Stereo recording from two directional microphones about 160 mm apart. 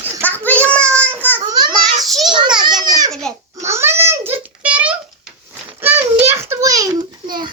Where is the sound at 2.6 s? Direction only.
25° right (ahead or behind).